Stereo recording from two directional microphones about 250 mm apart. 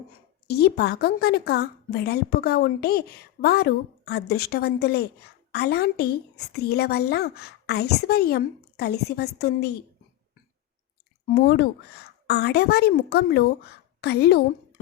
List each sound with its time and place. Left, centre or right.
0.4 s a woman's voice: left
11.3 s a woman's voice: left